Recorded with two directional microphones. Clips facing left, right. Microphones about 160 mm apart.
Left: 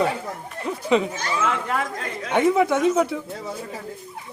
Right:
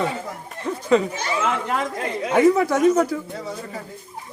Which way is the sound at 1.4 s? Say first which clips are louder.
Right 1 dB; 20° right (ahead or behind).